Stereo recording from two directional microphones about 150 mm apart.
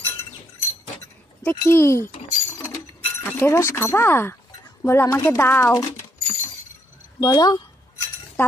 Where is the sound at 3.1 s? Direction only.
15° left (ahead or behind).